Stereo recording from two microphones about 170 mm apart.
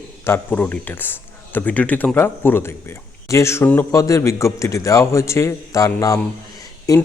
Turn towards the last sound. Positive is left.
turn(degrees=20)  # may be behind; listen again after turning